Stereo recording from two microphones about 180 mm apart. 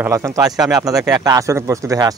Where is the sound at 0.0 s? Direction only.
15° right (ahead or behind).